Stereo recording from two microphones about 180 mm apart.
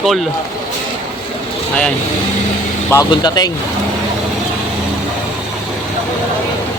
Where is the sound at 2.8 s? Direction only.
20° left (ahead or behind).